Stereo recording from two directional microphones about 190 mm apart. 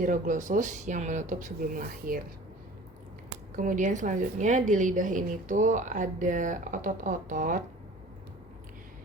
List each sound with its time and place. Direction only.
0.0 s a woman's voice: 45° right (ahead or behind)
3.5 s a woman's voice: 45° right (ahead or behind)